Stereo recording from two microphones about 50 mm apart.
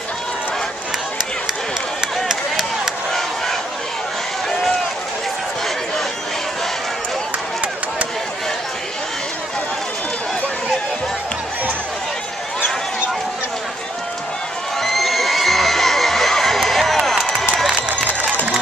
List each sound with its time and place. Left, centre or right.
2.2 s a sound: centre
3.1 s crowd: centre
14.8 s neigh: centre